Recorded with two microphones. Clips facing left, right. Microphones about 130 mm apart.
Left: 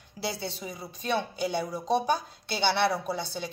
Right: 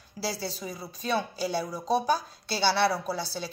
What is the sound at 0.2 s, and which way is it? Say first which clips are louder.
A woman's voice: right 1 dB; 20° left (ahead or behind).